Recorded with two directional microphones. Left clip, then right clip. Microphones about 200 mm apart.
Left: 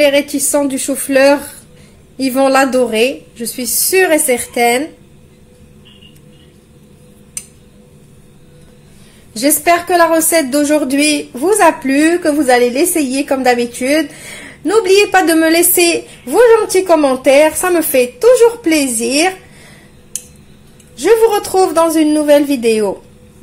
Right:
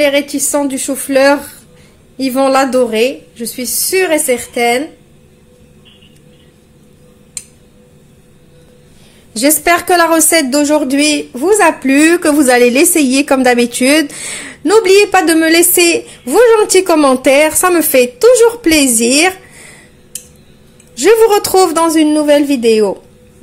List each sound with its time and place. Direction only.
0.0 s a woman's voice: 5° right (ahead or behind)
9.3 s a woman's voice: 20° right (ahead or behind)
20.9 s speech: 35° right (ahead or behind); by 22.9 s 15° right (ahead or behind)